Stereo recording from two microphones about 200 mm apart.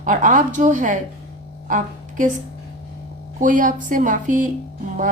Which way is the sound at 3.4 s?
40° right (ahead or behind).